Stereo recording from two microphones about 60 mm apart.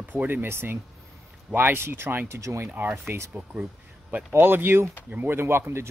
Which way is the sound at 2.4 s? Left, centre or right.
Right.